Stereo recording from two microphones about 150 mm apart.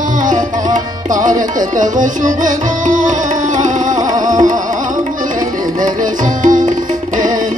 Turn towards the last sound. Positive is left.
turn(degrees=-60)  # may be behind; listen again after turning